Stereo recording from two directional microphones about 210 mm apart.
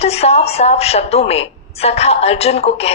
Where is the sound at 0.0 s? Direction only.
30° left (ahead or behind).